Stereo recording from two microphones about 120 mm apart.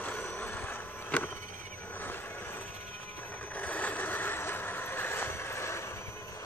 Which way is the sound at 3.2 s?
15° left (ahead or behind).